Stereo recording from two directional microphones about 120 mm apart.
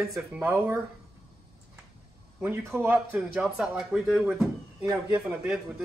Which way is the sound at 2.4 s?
20° right (ahead or behind).